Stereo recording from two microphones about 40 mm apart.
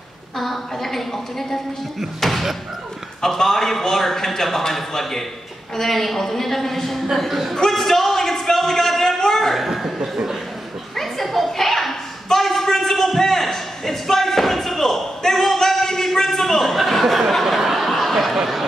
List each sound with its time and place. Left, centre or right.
0.4 s a woman's voice: centre
7.2 s a woman's voice: centre
7.5 s a sound: centre
9.6 s chuckle: centre
9.9 s chuckle: centre
11.0 s a sound: centre